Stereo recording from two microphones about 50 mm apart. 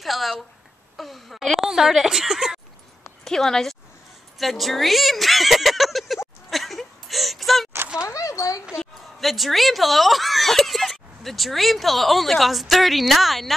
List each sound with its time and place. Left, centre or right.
0.0 s a sound: centre
0.9 s speech: centre
3.3 s speech: centre
6.5 s a sound: centre
8.0 s speech: left
8.7 s speech: centre